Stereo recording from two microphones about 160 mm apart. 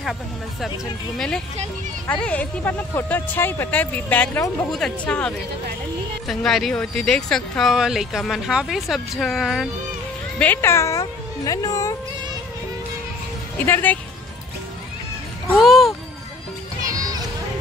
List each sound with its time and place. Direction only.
1.1 s speech: 5° left (ahead or behind)
10.4 s speech: 15° left (ahead or behind)
13.7 s speech: 10° left (ahead or behind)
15.5 s speech: centre (ahead or behind)
16.9 s a sound: 25° right (ahead or behind)